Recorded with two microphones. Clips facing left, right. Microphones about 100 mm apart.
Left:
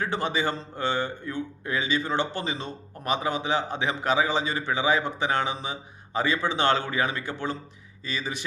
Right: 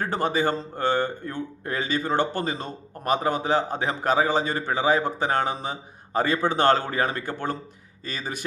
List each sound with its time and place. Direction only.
0.0 s speech: 45° right (ahead or behind)